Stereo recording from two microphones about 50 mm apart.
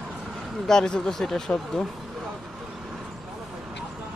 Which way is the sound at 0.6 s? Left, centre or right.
Centre.